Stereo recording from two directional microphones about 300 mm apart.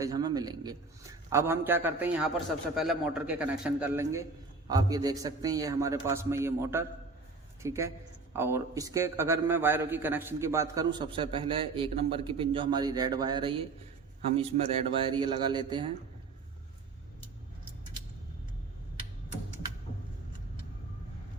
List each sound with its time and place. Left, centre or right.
0.0 s a man's voice: centre